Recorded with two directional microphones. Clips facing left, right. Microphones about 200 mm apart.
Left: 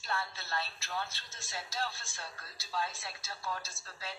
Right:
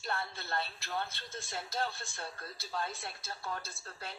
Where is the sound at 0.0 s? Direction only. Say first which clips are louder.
Even; 55° right (ahead or behind).